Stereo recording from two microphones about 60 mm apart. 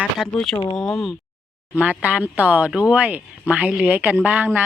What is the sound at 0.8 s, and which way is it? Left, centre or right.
Speech, centre.